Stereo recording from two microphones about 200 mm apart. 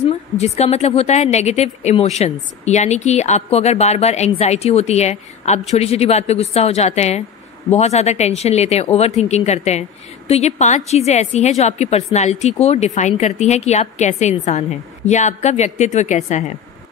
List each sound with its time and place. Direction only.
0.4 s a woman's voice: 30° left (ahead or behind)